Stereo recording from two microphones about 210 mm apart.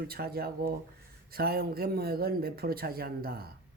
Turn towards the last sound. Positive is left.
turn(degrees=-45)  # may be behind; listen again after turning